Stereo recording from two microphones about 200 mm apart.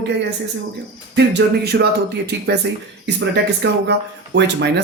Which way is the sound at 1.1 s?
55° right (ahead or behind).